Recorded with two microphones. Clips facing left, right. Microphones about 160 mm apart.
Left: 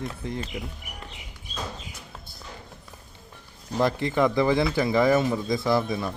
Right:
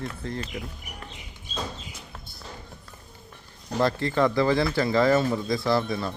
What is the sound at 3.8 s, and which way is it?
Speech, 15° left (ahead or behind).